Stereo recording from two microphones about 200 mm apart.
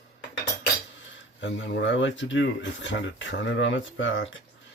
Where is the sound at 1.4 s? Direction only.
65° left (ahead or behind).